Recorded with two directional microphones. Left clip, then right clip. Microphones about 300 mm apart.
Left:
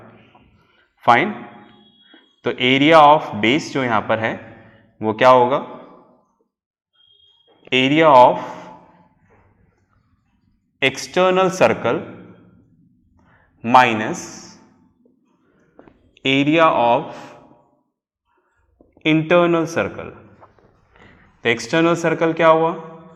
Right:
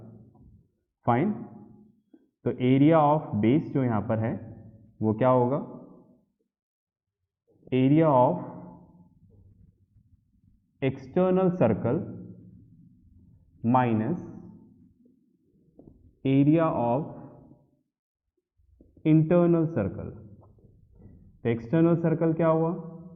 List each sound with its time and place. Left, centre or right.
0.0 s a sound: centre
1.0 s a man's voice: centre
7.7 s a sound: centre
10.8 s a man's voice: centre
13.6 s a man's voice: centre
16.2 s a man's voice: centre
19.0 s a man's voice: centre